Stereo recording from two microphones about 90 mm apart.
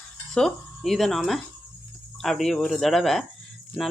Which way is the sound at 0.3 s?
5° left (ahead or behind).